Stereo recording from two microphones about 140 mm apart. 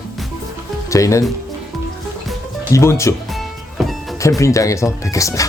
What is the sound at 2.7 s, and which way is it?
Speech, 20° left (ahead or behind).